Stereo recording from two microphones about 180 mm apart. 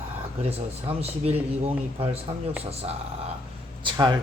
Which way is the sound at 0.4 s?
35° right (ahead or behind).